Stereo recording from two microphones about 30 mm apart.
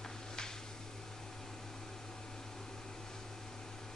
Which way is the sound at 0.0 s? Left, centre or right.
Left.